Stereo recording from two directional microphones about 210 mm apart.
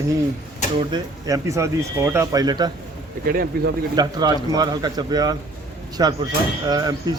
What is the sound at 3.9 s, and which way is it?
Speech, 20° right (ahead or behind).